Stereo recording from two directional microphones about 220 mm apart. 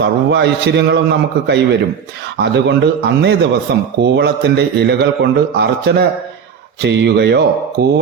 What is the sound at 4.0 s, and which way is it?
A man's voice, 50° right (ahead or behind).